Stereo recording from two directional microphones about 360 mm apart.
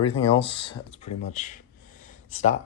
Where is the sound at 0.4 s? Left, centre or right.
Centre.